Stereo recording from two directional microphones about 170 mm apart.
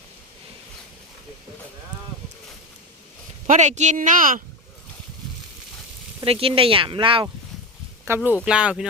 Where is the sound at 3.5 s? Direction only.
45° right (ahead or behind).